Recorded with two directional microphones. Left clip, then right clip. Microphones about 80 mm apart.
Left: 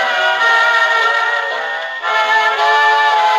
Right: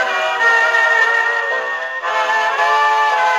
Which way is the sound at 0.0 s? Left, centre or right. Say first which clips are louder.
Left 2 dB; left.